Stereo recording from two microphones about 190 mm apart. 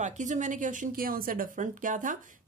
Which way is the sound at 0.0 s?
40° right (ahead or behind).